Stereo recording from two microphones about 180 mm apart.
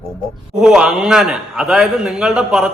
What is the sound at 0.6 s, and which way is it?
A man's voice, 5° right (ahead or behind).